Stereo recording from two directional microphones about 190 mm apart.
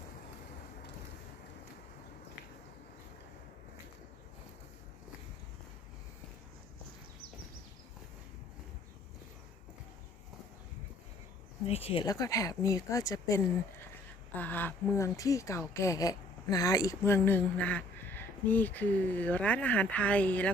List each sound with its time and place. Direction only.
11.6 s speech: 30° left (ahead or behind); by 20.5 s 5° left (ahead or behind)